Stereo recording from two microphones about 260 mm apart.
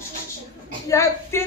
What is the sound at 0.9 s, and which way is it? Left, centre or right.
Speech, centre.